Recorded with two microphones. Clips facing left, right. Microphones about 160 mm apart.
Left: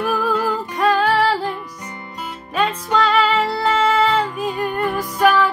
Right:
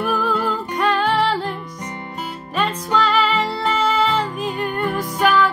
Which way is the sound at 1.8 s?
30° right (ahead or behind).